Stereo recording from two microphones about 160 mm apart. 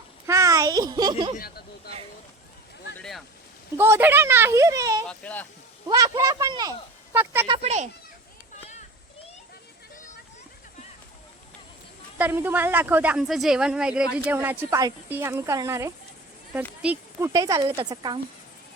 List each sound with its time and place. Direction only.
0.3 s a child's voice: 20° right (ahead or behind)
1.4 s speech: 70° left (ahead or behind)
3.0 s a sound: centre (ahead or behind)
3.8 s speech: 15° right (ahead or behind)
5.0 s speech: 10° left (ahead or behind)
5.9 s speech: 20° right (ahead or behind)
7.4 s speech: 35° right (ahead or behind)
12.1 s speech: 10° right (ahead or behind); by 18.2 s 30° right (ahead or behind)